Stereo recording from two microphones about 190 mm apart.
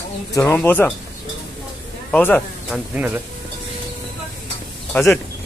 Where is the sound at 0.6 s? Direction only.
10° left (ahead or behind).